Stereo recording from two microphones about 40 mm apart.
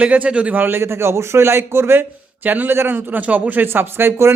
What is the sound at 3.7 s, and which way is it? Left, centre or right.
Speech, right.